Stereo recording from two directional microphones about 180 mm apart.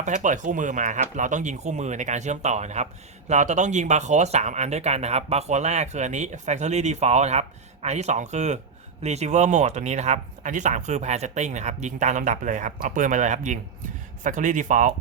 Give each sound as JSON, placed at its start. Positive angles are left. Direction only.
{"t": 0.0, "sound": "speech", "side_deg": -45}